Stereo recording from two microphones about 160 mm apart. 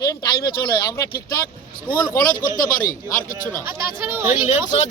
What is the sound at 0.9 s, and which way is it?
Speech, 20° left (ahead or behind).